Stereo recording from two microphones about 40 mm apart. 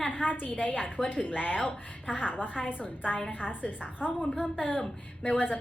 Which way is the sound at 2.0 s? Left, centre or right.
Right.